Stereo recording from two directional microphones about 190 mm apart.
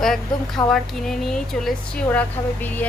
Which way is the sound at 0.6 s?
25° left (ahead or behind).